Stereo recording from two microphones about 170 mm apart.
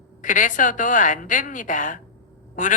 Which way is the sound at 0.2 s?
50° left (ahead or behind).